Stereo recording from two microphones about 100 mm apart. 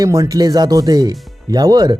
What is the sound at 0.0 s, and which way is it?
Speech, 35° right (ahead or behind).